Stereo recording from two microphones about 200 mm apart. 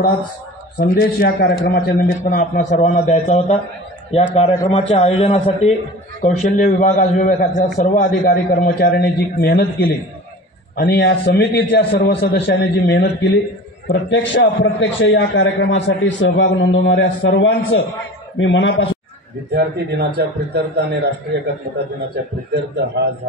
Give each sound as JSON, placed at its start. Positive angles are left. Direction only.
{"t": 0.7, "sound": "a man's voice", "side_deg": 45}
{"t": 4.6, "sound": "a man's voice", "side_deg": 30}
{"t": 19.5, "sound": "a man's voice", "side_deg": -55}
{"t": 22.2, "sound": "a man's voice", "side_deg": -55}